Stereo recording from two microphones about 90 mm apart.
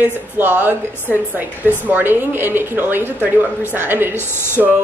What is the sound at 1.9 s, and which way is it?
A woman's voice, 25° right (ahead or behind).